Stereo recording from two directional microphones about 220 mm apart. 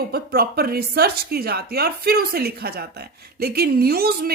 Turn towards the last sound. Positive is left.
turn(degrees=-45)  # may be behind; listen again after turning